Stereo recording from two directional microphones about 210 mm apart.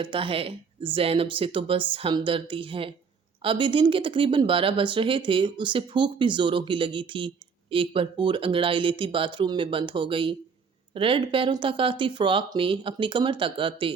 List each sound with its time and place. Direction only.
0.0 s speech: 25° right (ahead or behind)